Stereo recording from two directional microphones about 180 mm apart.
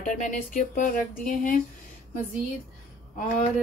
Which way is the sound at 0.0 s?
45° left (ahead or behind).